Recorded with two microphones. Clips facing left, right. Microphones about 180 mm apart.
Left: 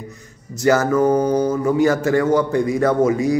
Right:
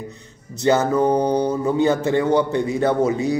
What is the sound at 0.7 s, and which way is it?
Speech, 20° right (ahead or behind).